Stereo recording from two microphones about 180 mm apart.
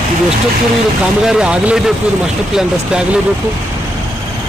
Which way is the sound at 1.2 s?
5° right (ahead or behind).